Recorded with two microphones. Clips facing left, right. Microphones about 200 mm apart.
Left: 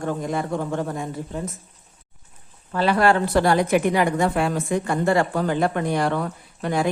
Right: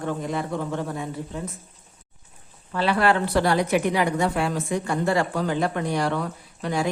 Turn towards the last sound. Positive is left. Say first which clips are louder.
# left 3 dB
turn(degrees=55)  # may be behind; listen again after turning